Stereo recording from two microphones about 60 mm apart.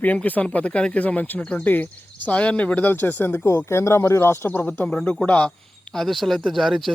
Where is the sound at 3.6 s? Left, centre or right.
Left.